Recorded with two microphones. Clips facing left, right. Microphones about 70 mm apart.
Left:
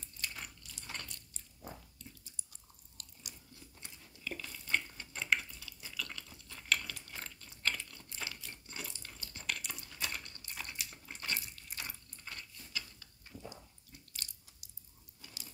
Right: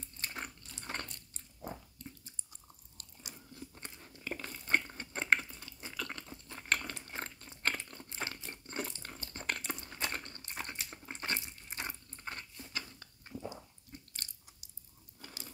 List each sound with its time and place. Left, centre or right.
0.2 s biting: right
3.0 s biting: right
3.5 s a sound: right
13.3 s biting: right